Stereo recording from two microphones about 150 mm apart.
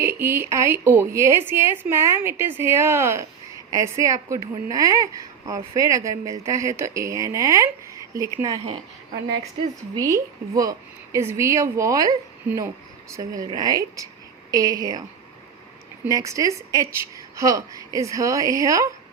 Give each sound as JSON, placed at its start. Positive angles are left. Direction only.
{"t": 0.0, "sound": "a woman's voice", "side_deg": -15}
{"t": 9.9, "sound": "a woman's voice", "side_deg": -20}
{"t": 13.1, "sound": "a woman's voice", "side_deg": -25}
{"t": 16.0, "sound": "a woman's voice", "side_deg": -20}